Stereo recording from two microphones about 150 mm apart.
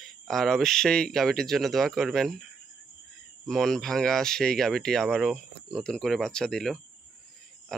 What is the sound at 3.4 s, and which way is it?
Speech, 5° left (ahead or behind).